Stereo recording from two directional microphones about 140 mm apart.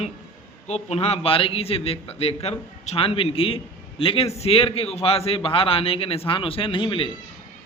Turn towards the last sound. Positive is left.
turn(degrees=35)  # may be behind; listen again after turning